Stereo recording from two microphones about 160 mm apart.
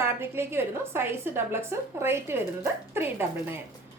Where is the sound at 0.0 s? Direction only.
15° right (ahead or behind).